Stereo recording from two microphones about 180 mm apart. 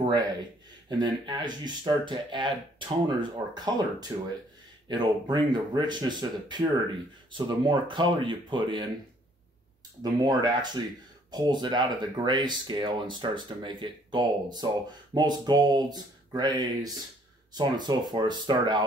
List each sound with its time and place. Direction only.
0.0 s speech: 20° right (ahead or behind)
10.2 s speech: 25° right (ahead or behind)